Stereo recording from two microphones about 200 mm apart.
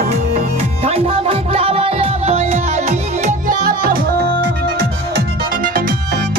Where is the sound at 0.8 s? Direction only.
30° right (ahead or behind); by 4.0 s 45° right (ahead or behind).